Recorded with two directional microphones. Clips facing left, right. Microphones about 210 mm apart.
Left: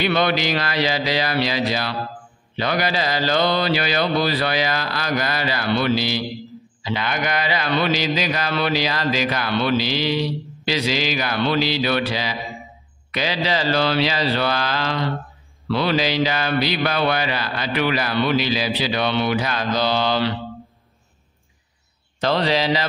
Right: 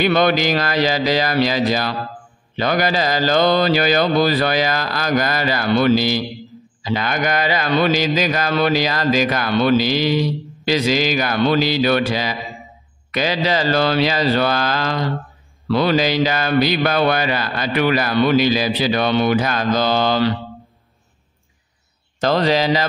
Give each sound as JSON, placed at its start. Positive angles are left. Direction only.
{"t": 0.0, "sound": "mantra", "side_deg": -45}
{"t": 22.2, "sound": "mantra", "side_deg": -45}